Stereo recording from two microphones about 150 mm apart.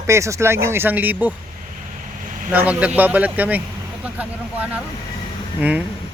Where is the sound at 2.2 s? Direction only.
60° right (ahead or behind).